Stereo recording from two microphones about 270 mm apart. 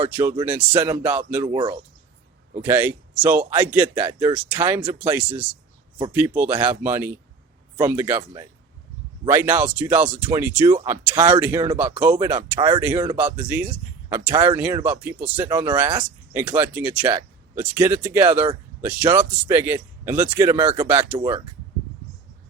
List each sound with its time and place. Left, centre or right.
0.0 s speech: centre
11.9 s speech: centre
12.8 s speech: centre